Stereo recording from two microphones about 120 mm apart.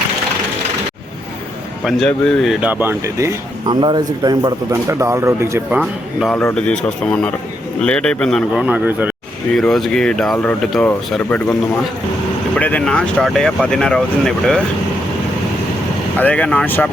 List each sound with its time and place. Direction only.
1.8 s speech: centre (ahead or behind)
2.6 s speech: 15° right (ahead or behind)
3.7 s speech: 40° right (ahead or behind)
4.9 s speech: 25° right (ahead or behind)
5.7 s speech: centre (ahead or behind)
6.3 s a man's voice: 10° left (ahead or behind)
8.6 s speech: 10° right (ahead or behind)
9.6 s a man's voice: centre (ahead or behind)
12.5 s speech: 10° left (ahead or behind)
16.1 s a man's voice: 10° left (ahead or behind)